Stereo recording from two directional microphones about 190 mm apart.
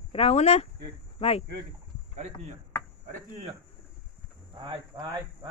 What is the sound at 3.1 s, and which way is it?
Insect, 35° right (ahead or behind).